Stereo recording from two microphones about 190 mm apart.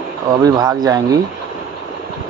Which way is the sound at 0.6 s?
20° right (ahead or behind).